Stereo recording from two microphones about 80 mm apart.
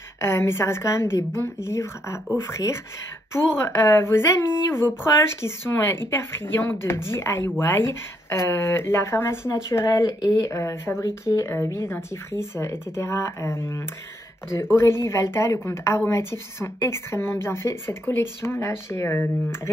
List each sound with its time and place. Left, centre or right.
0.2 s speech: left